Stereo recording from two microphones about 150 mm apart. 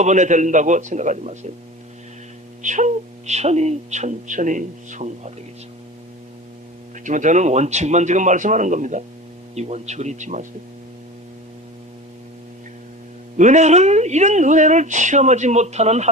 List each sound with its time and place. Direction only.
0.0 s speech: 50° right (ahead or behind)
2.6 s speech: 55° right (ahead or behind)
7.0 s a man's voice: 55° right (ahead or behind)
13.3 s speech: 55° right (ahead or behind)